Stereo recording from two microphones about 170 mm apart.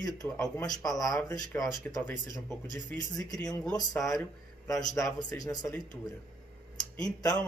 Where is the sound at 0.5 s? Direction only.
20° left (ahead or behind).